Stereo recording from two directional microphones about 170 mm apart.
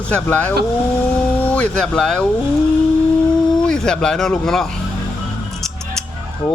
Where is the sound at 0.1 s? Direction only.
10° left (ahead or behind).